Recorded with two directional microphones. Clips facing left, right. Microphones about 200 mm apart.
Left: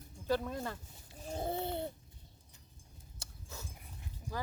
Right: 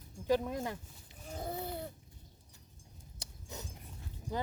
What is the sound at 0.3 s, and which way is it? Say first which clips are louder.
Speech: right 3 dB; 15° right (ahead or behind).